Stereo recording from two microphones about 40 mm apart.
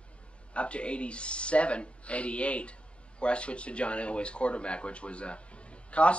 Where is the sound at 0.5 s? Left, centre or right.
Left.